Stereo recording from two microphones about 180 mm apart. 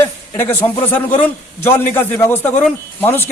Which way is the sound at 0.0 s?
10° left (ahead or behind).